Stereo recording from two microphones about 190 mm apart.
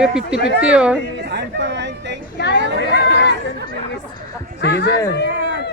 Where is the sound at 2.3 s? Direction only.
65° left (ahead or behind).